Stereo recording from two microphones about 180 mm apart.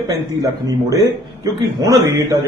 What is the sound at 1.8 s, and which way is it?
Speech, 20° right (ahead or behind).